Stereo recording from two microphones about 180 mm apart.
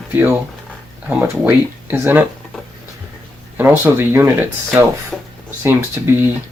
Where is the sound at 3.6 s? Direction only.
10° right (ahead or behind).